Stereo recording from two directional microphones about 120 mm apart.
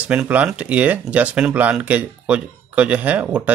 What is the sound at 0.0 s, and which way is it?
Speech, 10° right (ahead or behind).